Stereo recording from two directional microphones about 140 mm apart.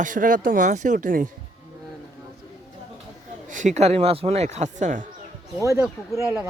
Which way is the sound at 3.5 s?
60° right (ahead or behind).